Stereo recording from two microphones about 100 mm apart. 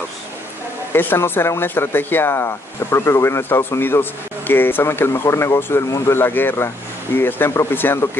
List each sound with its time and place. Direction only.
0.9 s speech: 20° left (ahead or behind)